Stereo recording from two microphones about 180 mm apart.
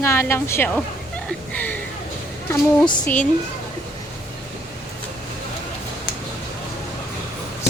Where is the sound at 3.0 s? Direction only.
5° left (ahead or behind).